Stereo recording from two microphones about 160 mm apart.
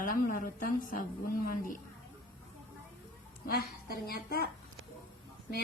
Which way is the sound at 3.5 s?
70° left (ahead or behind).